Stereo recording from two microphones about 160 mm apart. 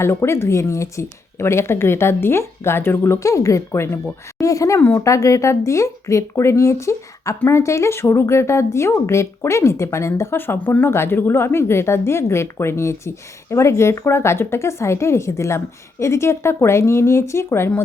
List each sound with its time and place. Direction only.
0.0 s speech: 15° left (ahead or behind)